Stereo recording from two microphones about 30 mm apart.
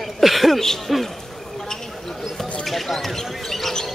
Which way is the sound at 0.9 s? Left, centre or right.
Centre.